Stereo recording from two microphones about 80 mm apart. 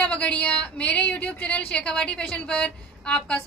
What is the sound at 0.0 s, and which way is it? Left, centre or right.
A woman's voice, centre.